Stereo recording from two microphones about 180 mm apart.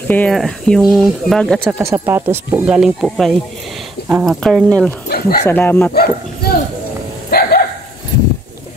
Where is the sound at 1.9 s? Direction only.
15° right (ahead or behind); by 5.9 s 10° left (ahead or behind).